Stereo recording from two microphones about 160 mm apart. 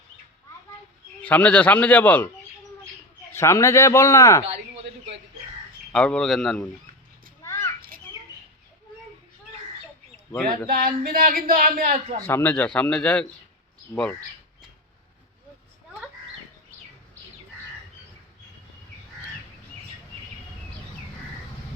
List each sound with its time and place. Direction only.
1.2 s a man's voice: 10° left (ahead or behind)
3.3 s a man's voice: 15° left (ahead or behind)
4.4 s a sound: 40° right (ahead or behind)
5.9 s speech: 5° left (ahead or behind)
7.4 s a sound: 20° left (ahead or behind)
7.8 s bird: 60° right (ahead or behind)
10.7 s a man's voice: 70° right (ahead or behind)
12.2 s a man's voice: 10° left (ahead or behind)